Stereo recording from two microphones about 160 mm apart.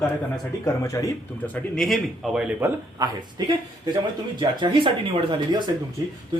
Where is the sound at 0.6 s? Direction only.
20° left (ahead or behind).